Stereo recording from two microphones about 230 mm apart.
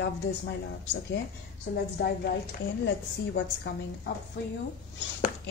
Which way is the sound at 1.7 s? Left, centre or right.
Left.